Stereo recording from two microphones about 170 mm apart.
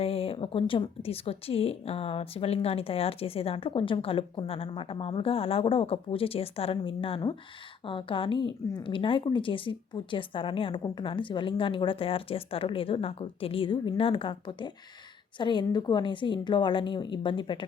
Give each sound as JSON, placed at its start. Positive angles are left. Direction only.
{"t": 0.0, "sound": "a woman's voice", "side_deg": 35}